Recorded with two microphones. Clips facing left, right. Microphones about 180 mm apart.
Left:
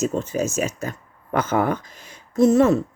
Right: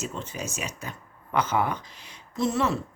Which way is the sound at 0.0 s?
45° left (ahead or behind).